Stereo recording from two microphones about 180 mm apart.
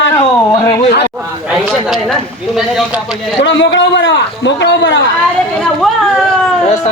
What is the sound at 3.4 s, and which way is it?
A man's voice, 90° left.